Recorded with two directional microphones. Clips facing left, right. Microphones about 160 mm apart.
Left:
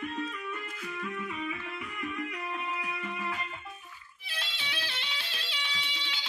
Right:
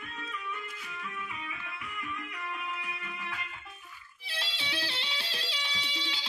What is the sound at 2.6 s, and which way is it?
Music, 40° left (ahead or behind).